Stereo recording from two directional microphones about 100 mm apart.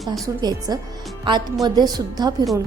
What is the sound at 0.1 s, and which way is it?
A woman's voice, 40° right (ahead or behind).